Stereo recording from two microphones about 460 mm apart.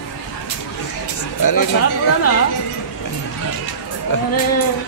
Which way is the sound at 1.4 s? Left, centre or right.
Left.